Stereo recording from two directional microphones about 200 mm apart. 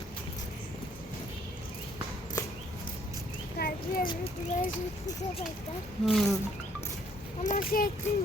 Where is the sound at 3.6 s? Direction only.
45° left (ahead or behind).